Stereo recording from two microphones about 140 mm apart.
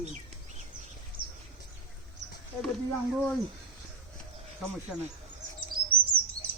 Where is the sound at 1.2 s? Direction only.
35° right (ahead or behind).